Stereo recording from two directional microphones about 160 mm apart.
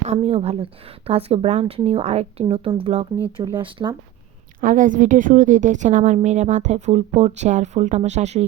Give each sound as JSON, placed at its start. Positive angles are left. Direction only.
{"t": 0.0, "sound": "speech", "side_deg": -40}
{"t": 4.6, "sound": "a woman's voice", "side_deg": -55}